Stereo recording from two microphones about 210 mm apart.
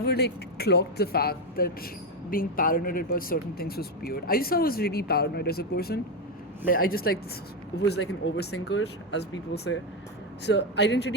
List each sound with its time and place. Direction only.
0.0 s speech: 50° left (ahead or behind)
7.8 s speech: 55° left (ahead or behind)